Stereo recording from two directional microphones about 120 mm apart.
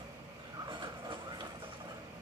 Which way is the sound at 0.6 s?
40° right (ahead or behind).